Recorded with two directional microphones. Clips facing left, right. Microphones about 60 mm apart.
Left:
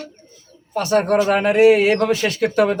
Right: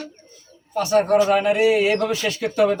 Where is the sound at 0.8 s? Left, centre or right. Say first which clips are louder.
Even; left.